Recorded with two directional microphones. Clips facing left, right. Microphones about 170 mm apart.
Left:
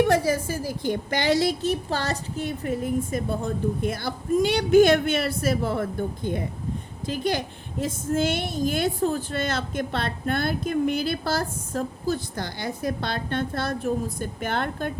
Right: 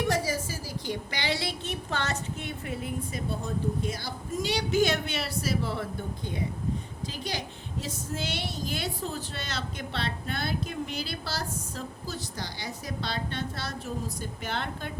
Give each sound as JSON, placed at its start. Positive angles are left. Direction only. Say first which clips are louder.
{"t": 0.1, "sound": "a woman's voice", "louder": "left 7 dB", "side_deg": 55}